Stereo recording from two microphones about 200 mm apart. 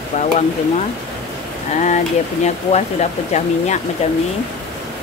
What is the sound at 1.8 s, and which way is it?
Speech, 35° left (ahead or behind).